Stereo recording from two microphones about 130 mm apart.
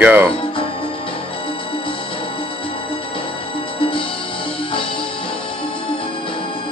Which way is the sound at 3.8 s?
40° left (ahead or behind).